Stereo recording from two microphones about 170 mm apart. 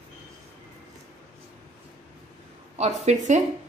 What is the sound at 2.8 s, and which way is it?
Speech, 40° right (ahead or behind).